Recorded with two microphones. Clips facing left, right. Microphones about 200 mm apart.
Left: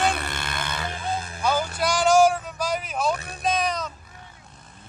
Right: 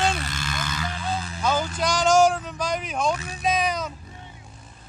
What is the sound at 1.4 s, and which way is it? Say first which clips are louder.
A man's voice: even; 10° left (ahead or behind).